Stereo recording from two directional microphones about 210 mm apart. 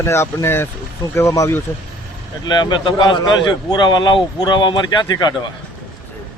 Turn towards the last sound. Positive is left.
turn(degrees=20)  # may be behind; listen again after turning